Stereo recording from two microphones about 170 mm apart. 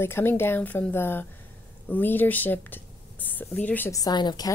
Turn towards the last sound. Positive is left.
turn(degrees=25)  # may be behind; listen again after turning